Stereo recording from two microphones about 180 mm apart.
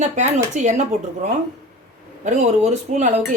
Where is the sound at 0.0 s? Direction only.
40° right (ahead or behind).